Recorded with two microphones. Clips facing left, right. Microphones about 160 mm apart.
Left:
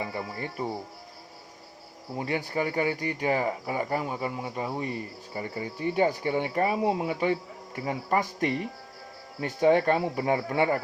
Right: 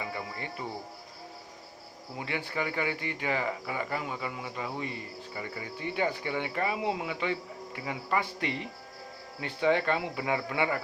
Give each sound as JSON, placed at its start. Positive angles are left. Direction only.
{"t": 0.0, "sound": "music", "side_deg": 35}
{"t": 2.1, "sound": "speech", "side_deg": 40}